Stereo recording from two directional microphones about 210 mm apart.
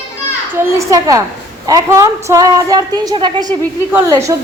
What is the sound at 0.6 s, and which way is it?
A woman's voice, 15° right (ahead or behind).